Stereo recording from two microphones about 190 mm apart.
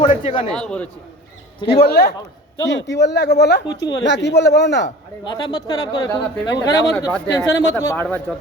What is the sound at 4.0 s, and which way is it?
Speech, 70° left (ahead or behind).